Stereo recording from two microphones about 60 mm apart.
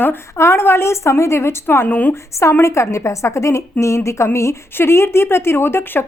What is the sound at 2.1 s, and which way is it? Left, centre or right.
A woman's voice, left.